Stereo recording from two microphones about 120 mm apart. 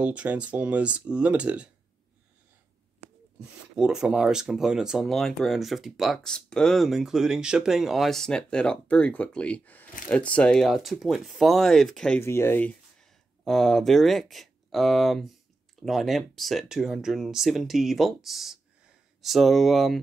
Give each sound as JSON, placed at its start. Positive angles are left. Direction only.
{"t": 0.0, "sound": "speech", "side_deg": -10}
{"t": 3.3, "sound": "speech", "side_deg": -5}
{"t": 12.2, "sound": "speech", "side_deg": 20}
{"t": 13.4, "sound": "speech", "side_deg": 0}